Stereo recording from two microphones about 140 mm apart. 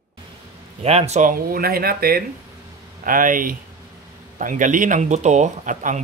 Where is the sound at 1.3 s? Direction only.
90° right.